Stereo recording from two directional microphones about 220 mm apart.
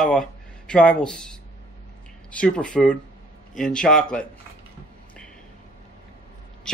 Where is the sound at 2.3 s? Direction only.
5° left (ahead or behind).